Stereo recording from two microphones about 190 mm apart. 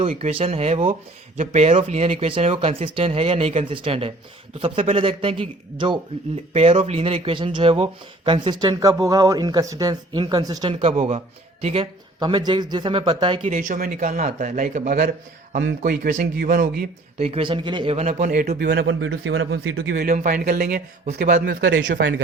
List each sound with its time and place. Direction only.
0.2 s speech: 30° right (ahead or behind)
13.6 s speech: 45° right (ahead or behind); by 21.8 s 70° right (ahead or behind)